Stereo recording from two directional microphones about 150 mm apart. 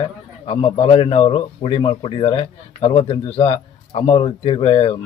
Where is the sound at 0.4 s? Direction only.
40° left (ahead or behind).